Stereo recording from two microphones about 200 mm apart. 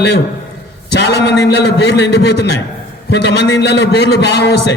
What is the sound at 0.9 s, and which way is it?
A man's voice, 55° left (ahead or behind).